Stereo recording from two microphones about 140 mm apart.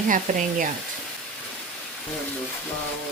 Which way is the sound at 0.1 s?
70° right (ahead or behind).